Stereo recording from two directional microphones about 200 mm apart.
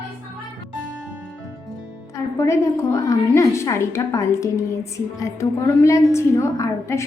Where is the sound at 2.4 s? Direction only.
15° left (ahead or behind).